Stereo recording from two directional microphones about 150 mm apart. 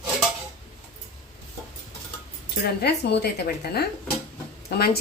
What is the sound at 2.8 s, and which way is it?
A woman's voice, 90° left.